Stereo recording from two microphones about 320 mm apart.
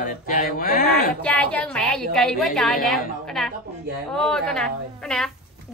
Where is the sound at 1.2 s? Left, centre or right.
Centre.